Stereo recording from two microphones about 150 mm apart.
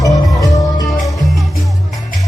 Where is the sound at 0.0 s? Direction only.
20° left (ahead or behind).